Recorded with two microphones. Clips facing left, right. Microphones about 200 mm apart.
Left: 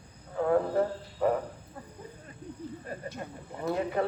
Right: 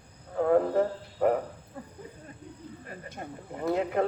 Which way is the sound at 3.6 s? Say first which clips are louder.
Right 2 dB; 60° right (ahead or behind).